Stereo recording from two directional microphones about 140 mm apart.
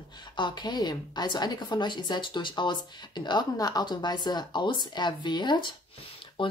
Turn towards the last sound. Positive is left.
turn(degrees=40)  # may be behind; listen again after turning